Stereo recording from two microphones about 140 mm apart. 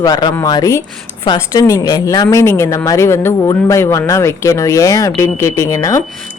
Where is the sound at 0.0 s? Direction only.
30° left (ahead or behind).